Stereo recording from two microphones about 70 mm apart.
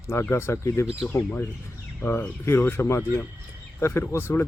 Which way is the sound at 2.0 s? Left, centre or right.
Left.